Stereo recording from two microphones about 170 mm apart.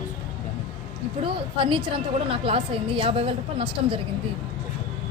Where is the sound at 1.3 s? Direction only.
30° right (ahead or behind).